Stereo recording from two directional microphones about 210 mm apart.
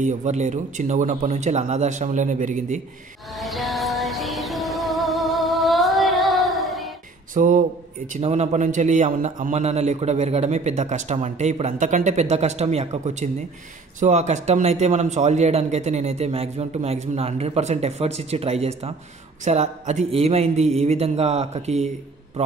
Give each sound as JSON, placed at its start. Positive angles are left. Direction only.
{"t": 0.0, "sound": "a man's voice", "side_deg": -35}
{"t": 3.3, "sound": "music", "side_deg": 0}
{"t": 7.3, "sound": "a man's voice", "side_deg": -40}